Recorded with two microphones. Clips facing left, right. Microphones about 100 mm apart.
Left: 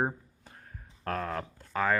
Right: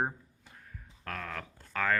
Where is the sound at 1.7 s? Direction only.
20° left (ahead or behind).